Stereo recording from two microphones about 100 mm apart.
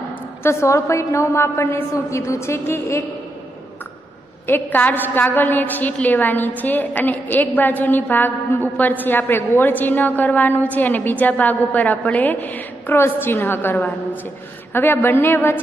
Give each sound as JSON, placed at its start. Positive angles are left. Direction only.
{"t": 0.4, "sound": "a woman's voice", "side_deg": 30}
{"t": 4.5, "sound": "a woman's voice", "side_deg": 20}